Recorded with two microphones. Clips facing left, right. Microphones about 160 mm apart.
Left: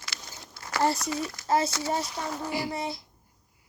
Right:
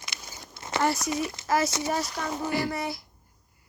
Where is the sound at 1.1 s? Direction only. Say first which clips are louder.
Right 2 dB; 20° right (ahead or behind).